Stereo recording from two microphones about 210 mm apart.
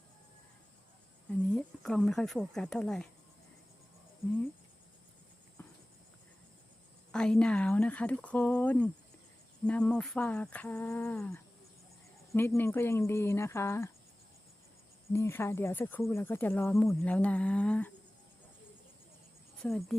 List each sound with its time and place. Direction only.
1.5 s speech: 5° left (ahead or behind)
5.6 s clip-clop: 10° left (ahead or behind)
7.1 s speech: 5° left (ahead or behind)
9.6 s a sound: 5° left (ahead or behind)
12.3 s speech: 10° left (ahead or behind)
15.1 s speech: 10° left (ahead or behind)
19.6 s a sound: centre (ahead or behind)